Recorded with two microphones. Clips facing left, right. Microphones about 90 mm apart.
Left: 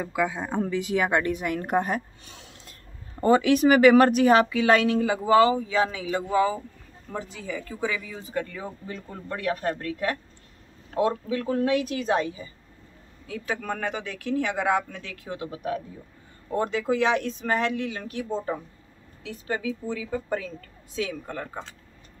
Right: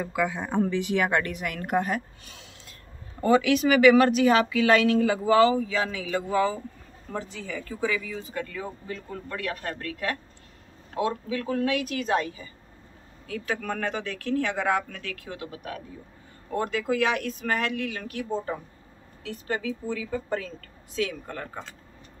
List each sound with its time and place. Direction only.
0.0 s speech: 20° left (ahead or behind)
3.2 s speech: 40° left (ahead or behind); by 10.1 s 25° left (ahead or behind)
11.0 s speech: 35° left (ahead or behind)
19.2 s speech: 15° left (ahead or behind)